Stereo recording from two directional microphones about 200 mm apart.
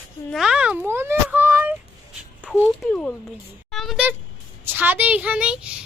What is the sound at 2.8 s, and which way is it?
Speech, 5° left (ahead or behind).